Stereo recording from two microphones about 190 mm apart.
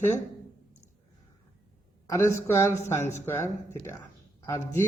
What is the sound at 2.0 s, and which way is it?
Speech, 15° left (ahead or behind).